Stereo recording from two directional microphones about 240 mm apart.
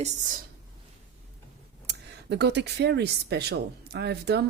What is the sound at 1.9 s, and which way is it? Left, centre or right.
Speech, right.